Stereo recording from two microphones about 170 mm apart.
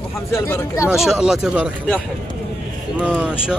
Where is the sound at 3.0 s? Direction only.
5° right (ahead or behind).